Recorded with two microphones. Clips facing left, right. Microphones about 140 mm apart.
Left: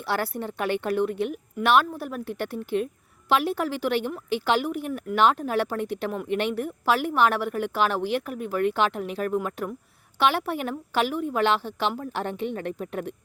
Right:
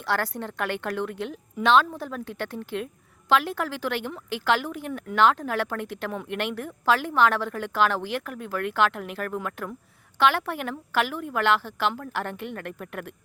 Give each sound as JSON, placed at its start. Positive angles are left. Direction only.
{"t": 0.0, "sound": "a woman's voice", "side_deg": 10}